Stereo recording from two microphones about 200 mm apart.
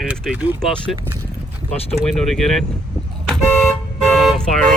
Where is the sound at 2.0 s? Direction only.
Centre (ahead or behind).